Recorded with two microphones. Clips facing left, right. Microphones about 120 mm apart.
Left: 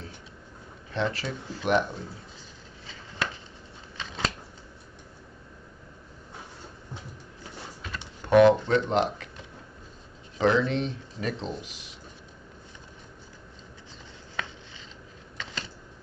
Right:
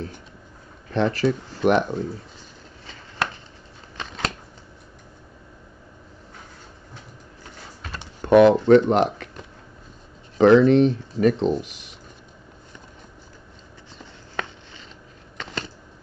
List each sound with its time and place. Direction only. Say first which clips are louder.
0.9 s speech: right 9 dB; 55° right (ahead or behind)
3.9 s scissors: right 2 dB; 55° right (ahead or behind)
8.2 s speech: right 4 dB; 60° right (ahead or behind)
10.3 s speech: right 10 dB; 55° right (ahead or behind)
14.4 s a sound: right 5 dB; 55° right (ahead or behind)